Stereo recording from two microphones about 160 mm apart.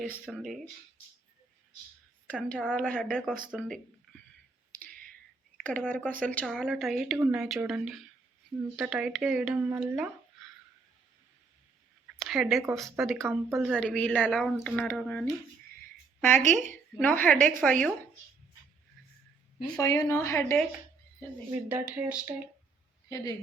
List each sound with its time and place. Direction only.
0.3 s speech: centre (ahead or behind)
2.2 s speech: 5° left (ahead or behind)
5.5 s speech: 10° left (ahead or behind)
12.1 s a sound: centre (ahead or behind)
12.7 s speech: centre (ahead or behind)
16.4 s a woman's voice: 50° right (ahead or behind)
17.0 s speech: 10° left (ahead or behind)
19.6 s speech: 25° left (ahead or behind)
21.7 s speech: 15° right (ahead or behind)
23.0 s a woman's voice: 20° left (ahead or behind)